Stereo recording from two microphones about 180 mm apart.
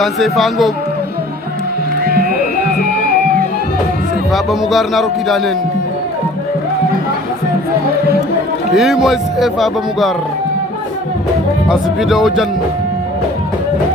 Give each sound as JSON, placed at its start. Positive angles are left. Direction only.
{"t": 0.0, "sound": "speech", "side_deg": 0}
{"t": 2.0, "sound": "music", "side_deg": -55}
{"t": 4.3, "sound": "speech", "side_deg": 0}
{"t": 8.7, "sound": "speech", "side_deg": 0}
{"t": 11.7, "sound": "speech", "side_deg": 0}